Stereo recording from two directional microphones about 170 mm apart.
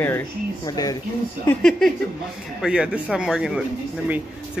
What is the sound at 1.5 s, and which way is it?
Speech, 5° left (ahead or behind).